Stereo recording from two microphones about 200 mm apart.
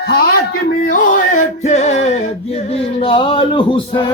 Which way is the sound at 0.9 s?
35° left (ahead or behind).